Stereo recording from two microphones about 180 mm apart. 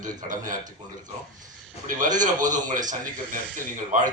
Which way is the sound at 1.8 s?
45° right (ahead or behind).